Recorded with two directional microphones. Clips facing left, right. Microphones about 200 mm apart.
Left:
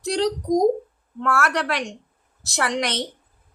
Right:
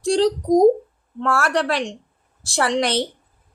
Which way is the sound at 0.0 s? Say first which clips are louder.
Right 5 dB; 30° right (ahead or behind).